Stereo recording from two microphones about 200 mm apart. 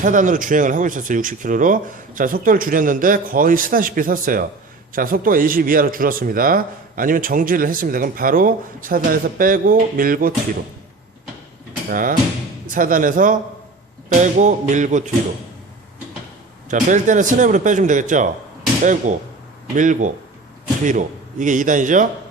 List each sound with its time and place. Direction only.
0.0 s a man's voice: 40° right (ahead or behind)
11.9 s a man's voice: 45° right (ahead or behind)
16.6 s speech: 40° right (ahead or behind)